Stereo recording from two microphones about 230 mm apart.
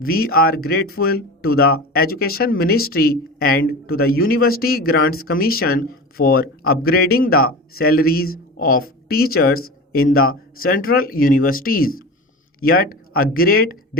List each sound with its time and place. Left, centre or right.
0.0 s speech: left